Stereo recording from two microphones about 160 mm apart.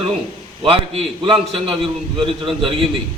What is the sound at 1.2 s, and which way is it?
Speech, 35° right (ahead or behind).